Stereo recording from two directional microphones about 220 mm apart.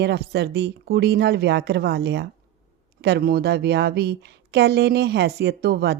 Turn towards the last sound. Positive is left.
turn(degrees=-45)  # may be behind; listen again after turning